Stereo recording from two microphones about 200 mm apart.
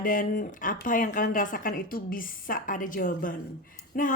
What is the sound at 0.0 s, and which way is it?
A woman's voice, 45° left (ahead or behind).